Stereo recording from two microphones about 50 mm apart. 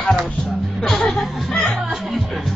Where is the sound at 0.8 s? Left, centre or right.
Centre.